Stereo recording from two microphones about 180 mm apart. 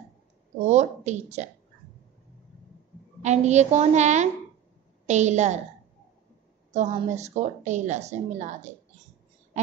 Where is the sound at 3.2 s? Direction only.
40° right (ahead or behind).